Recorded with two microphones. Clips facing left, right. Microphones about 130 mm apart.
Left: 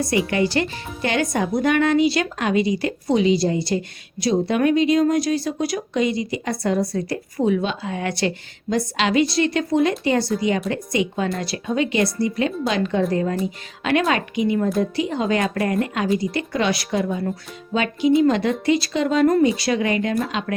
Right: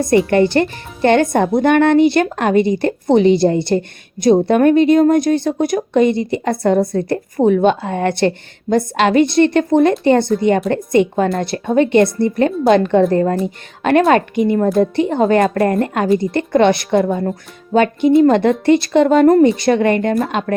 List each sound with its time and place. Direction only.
0.3 s a woman's voice: 55° right (ahead or behind)